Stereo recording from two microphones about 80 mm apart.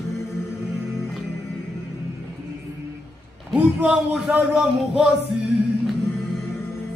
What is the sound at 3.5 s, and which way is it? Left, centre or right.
Music, centre.